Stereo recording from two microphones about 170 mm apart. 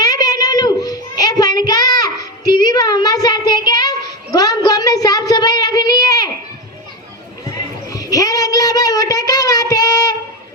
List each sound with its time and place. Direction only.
0.0 s a sound: 25° left (ahead or behind)
1.6 s child singing: 25° left (ahead or behind)
7.9 s child singing: 20° left (ahead or behind)